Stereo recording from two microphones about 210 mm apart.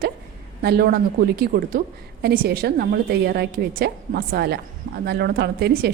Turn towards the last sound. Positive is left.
turn(degrees=-50)  # may be behind; listen again after turning